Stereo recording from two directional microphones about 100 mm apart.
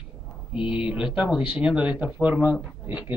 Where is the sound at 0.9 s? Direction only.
10° right (ahead or behind).